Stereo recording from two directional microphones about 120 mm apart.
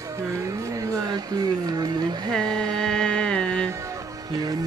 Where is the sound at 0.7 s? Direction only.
30° right (ahead or behind).